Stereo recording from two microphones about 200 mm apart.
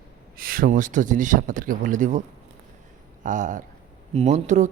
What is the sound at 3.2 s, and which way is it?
Speech, 40° right (ahead or behind).